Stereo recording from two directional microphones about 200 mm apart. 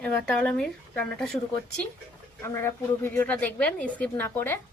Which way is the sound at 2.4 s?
15° left (ahead or behind).